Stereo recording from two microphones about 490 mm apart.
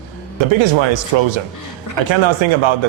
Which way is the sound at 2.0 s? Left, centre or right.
Right.